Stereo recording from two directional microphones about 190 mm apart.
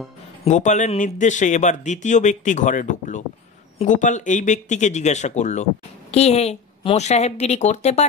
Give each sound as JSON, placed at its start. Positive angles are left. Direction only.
{"t": 0.5, "sound": "speech", "side_deg": 40}